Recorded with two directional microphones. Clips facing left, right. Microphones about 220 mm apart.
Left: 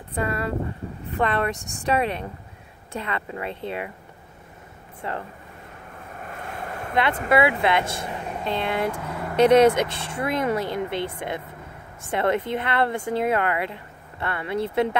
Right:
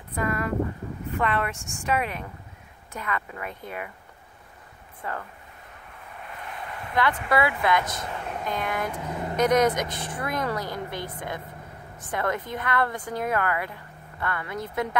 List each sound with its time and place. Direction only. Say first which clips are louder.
0.1 s speech: left 1 dB; 30° left (ahead or behind)
5.0 s speech: left 3 dB; 25° left (ahead or behind)
6.2 s vehicle: left 4 dB; 45° left (ahead or behind)
7.2 s speech: left 6 dB; 25° left (ahead or behind)
8.9 s speech: even; 15° right (ahead or behind)
9.4 s speech: left 6 dB; 30° left (ahead or behind)